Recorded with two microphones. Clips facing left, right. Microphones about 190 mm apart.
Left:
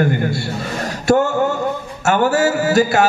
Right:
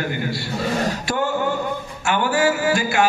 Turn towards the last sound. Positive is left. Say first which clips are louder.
# left 5 dB
turn(degrees=40)  # may be behind; listen again after turning